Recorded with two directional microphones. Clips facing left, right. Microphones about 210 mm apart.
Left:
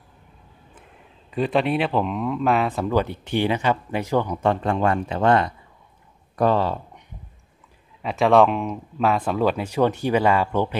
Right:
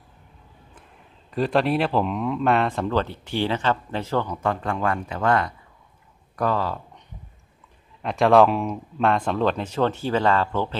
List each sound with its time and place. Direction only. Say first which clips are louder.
1.3 s speech: even; centre (ahead or behind); by 6.8 s 25° left (ahead or behind)
8.0 s speech: even; centre (ahead or behind)